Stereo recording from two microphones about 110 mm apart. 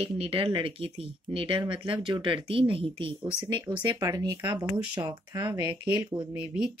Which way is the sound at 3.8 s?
35° right (ahead or behind).